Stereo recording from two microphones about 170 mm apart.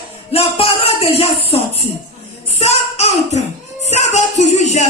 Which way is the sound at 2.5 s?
40° left (ahead or behind).